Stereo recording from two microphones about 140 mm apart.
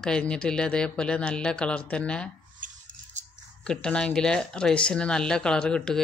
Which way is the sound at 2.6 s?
70° right (ahead or behind).